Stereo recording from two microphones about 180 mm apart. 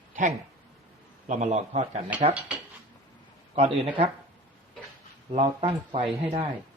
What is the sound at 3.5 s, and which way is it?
Speech, 35° right (ahead or behind).